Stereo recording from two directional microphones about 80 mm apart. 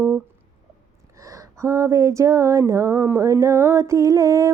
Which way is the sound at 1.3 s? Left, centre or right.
Right.